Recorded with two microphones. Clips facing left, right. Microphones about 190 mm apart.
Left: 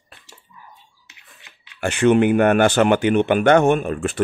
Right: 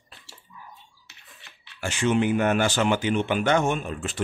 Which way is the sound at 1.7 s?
60° left (ahead or behind).